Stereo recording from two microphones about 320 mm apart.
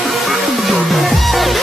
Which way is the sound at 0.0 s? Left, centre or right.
Centre.